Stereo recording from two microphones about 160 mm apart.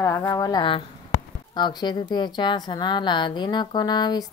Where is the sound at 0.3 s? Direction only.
25° left (ahead or behind).